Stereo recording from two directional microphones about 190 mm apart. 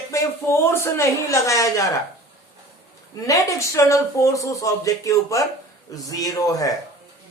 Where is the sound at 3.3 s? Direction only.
15° left (ahead or behind).